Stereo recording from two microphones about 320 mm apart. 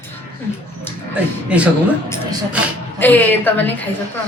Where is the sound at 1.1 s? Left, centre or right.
Centre.